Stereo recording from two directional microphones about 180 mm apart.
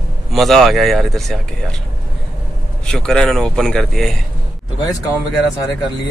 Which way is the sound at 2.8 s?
5° left (ahead or behind).